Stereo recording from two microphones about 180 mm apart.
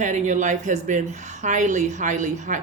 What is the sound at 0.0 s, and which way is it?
A woman's voice, 45° right (ahead or behind).